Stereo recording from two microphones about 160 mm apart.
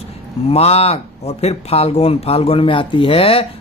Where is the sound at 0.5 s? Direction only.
40° left (ahead or behind).